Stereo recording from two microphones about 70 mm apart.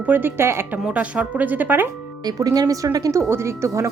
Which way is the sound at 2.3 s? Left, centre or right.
Right.